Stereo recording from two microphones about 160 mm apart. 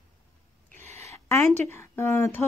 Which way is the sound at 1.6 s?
15° left (ahead or behind).